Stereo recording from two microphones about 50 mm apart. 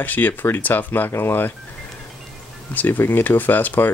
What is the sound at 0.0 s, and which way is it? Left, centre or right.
Speech, left.